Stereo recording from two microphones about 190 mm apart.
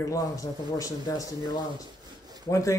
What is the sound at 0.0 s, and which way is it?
Speech, 20° left (ahead or behind).